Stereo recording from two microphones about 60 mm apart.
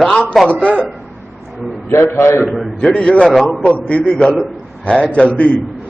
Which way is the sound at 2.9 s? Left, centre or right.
Centre.